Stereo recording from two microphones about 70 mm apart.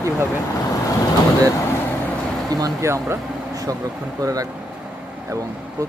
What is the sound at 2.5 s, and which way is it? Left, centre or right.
Speech, right.